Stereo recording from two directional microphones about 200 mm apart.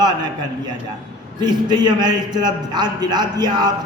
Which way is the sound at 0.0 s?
20° right (ahead or behind).